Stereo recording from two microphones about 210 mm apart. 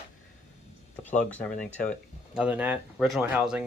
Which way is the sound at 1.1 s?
5° left (ahead or behind).